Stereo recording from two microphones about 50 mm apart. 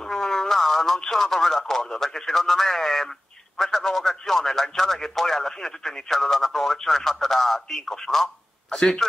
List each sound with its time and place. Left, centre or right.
0.1 s speech: centre